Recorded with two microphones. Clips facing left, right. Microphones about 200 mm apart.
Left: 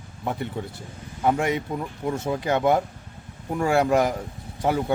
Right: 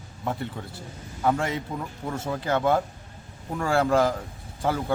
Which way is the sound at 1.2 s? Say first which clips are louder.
Left 3 dB; 15° left (ahead or behind).